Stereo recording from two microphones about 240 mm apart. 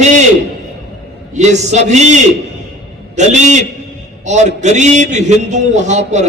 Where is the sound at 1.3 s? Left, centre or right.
Right.